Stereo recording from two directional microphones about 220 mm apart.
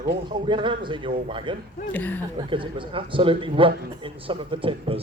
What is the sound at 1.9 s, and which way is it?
Speech, 10° left (ahead or behind).